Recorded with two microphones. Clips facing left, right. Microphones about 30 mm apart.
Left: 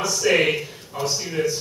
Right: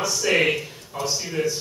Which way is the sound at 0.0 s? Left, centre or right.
Centre.